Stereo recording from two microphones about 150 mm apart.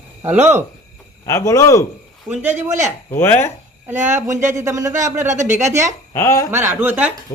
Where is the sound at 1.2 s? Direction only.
20° left (ahead or behind).